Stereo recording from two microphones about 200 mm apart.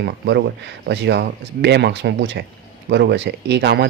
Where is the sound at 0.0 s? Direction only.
60° right (ahead or behind).